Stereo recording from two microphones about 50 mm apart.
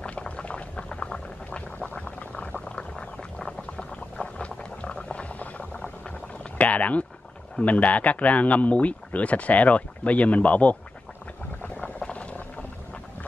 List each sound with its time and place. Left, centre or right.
0.0 s boiling: centre
6.6 s a sound: left
7.6 s speech: left
12.0 s boat: left